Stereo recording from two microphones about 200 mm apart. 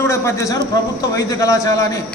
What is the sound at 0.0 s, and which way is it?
A man's voice, 15° left (ahead or behind).